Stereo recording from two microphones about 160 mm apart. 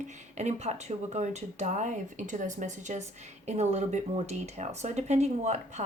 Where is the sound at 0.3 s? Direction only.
45° right (ahead or behind).